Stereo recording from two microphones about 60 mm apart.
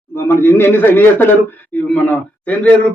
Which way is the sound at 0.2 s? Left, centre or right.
Left.